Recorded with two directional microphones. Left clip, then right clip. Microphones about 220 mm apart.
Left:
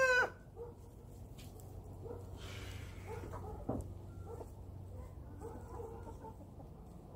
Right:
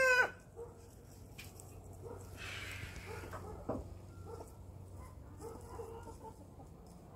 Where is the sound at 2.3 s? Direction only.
50° left (ahead or behind).